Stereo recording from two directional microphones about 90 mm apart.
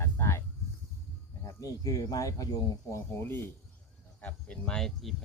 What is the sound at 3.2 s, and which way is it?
Speech, 25° left (ahead or behind).